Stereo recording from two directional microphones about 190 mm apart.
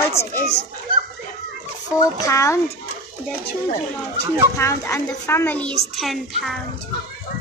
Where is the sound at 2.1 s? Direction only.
15° left (ahead or behind).